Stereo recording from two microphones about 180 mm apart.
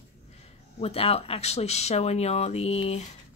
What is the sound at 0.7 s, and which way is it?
A woman's voice, 35° left (ahead or behind).